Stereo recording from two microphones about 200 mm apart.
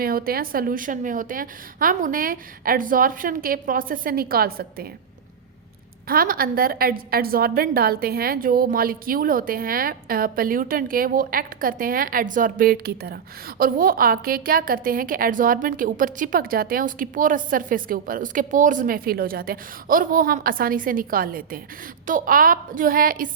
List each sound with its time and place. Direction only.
0.0 s a woman's voice: 50° right (ahead or behind)
6.1 s a woman's voice: 45° right (ahead or behind)